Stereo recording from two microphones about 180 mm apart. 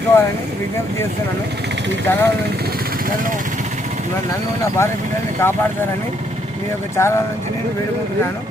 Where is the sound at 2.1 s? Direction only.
10° left (ahead or behind).